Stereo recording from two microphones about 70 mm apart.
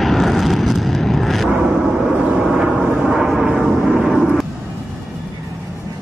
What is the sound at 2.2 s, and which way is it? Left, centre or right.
Vehicle, centre.